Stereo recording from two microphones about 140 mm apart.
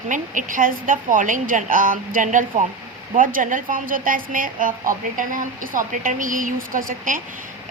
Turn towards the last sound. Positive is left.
turn(degrees=-75)  # may be behind; listen again after turning